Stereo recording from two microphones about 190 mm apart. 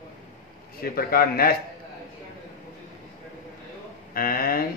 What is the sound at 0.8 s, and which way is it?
Speech, 50° left (ahead or behind).